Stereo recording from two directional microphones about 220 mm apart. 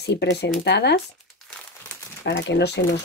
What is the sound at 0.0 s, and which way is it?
Speech, 50° left (ahead or behind).